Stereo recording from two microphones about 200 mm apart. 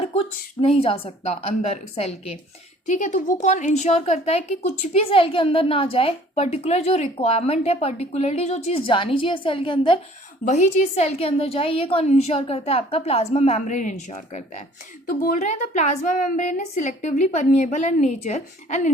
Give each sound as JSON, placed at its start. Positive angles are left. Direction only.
{"t": 0.1, "sound": "a woman's voice", "side_deg": 30}
{"t": 10.4, "sound": "a woman's voice", "side_deg": 35}